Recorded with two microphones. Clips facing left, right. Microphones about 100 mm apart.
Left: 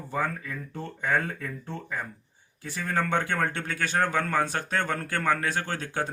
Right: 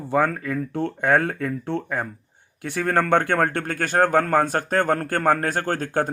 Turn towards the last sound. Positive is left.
turn(degrees=-50)  # may be behind; listen again after turning